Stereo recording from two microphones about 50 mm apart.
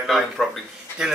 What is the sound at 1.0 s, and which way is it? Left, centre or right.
Speech, centre.